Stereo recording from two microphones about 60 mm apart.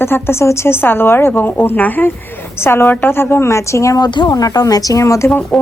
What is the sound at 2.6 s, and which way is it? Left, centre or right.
A woman's voice, left.